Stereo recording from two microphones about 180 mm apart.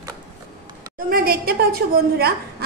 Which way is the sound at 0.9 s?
55° right (ahead or behind).